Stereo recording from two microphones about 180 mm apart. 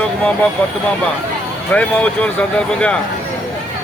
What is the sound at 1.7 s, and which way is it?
Speech, 5° left (ahead or behind).